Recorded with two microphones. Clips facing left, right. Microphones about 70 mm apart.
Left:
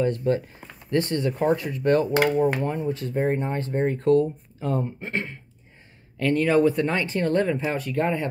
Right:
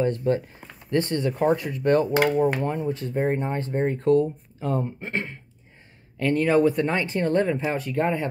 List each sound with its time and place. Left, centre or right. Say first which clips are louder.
0.0 s speech: even; right
3.0 s speech: even; right